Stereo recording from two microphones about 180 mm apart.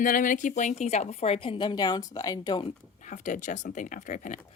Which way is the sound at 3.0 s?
45° left (ahead or behind).